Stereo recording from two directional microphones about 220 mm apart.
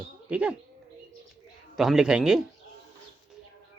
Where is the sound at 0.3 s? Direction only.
5° right (ahead or behind).